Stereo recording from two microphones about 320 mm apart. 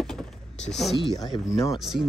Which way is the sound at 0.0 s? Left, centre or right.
Centre.